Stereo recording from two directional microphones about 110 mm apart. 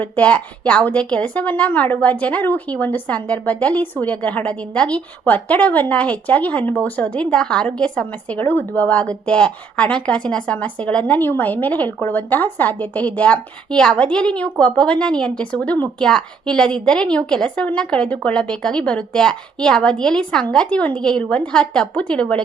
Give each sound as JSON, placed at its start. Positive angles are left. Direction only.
{"t": 0.0, "sound": "a woman's voice", "side_deg": 15}